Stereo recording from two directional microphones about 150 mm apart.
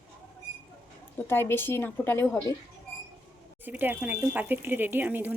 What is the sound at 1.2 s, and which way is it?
Speech, 15° left (ahead or behind).